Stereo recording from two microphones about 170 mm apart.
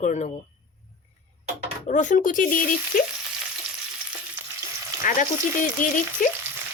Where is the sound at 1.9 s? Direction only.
45° left (ahead or behind).